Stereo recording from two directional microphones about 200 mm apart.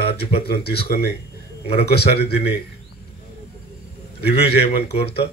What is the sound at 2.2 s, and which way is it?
Speech, 55° left (ahead or behind).